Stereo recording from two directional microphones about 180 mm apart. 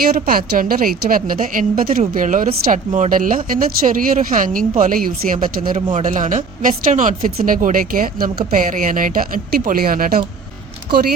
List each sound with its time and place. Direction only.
0.3 s a woman's voice: 50° right (ahead or behind)